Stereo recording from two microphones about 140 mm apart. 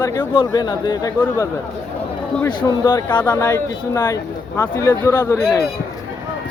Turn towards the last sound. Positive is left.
turn(degrees=20)  # may be behind; listen again after turning